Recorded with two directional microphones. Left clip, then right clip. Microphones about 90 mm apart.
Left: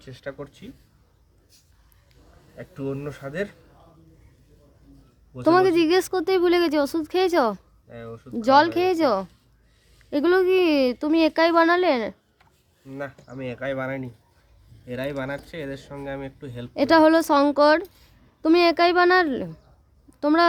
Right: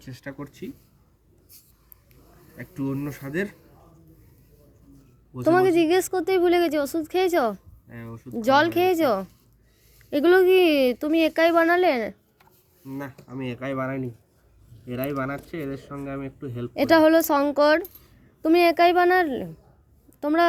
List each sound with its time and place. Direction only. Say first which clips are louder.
0.0 s speech: left 3 dB; 40° left (ahead or behind)
2.6 s speech: right 1 dB; 45° left (ahead or behind)
5.5 s a woman's voice: left 1 dB; 25° left (ahead or behind)
7.5 s speech: left 3 dB; 40° left (ahead or behind)
8.4 s speech: left 2 dB; 15° left (ahead or behind)
10.0 s speech: right 2 dB; centre (ahead or behind)
11.1 s a woman's voice: left 2 dB; 20° left (ahead or behind)
13.2 s speech: even; 35° left (ahead or behind)
14.8 s speech: even; 55° left (ahead or behind)
16.7 s a woman's voice: left 1 dB; 10° left (ahead or behind); by 20.4 s 25° left (ahead or behind)